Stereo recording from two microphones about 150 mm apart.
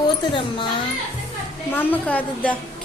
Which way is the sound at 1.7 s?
10° left (ahead or behind).